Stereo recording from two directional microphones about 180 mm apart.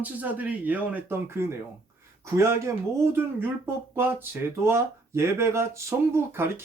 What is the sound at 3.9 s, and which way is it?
Speech, 10° right (ahead or behind).